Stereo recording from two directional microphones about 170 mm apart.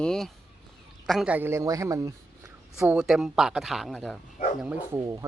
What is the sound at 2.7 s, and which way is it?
Speech, 10° right (ahead or behind).